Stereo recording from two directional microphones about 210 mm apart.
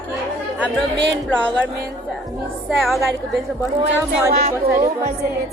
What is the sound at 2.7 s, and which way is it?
Speech, centre (ahead or behind).